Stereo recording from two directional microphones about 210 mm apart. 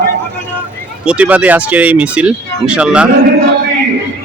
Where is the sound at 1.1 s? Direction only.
5° right (ahead or behind).